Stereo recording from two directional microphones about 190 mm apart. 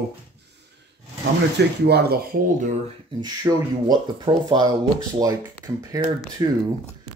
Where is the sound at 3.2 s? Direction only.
20° right (ahead or behind).